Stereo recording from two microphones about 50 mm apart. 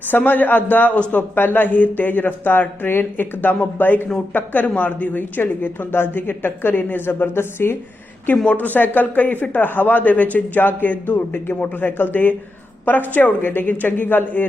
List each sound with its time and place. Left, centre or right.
0.1 s speech: left
5.4 s a woman's voice: left
8.3 s a woman's voice: left